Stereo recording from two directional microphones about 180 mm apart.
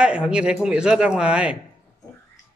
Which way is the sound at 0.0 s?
5° right (ahead or behind).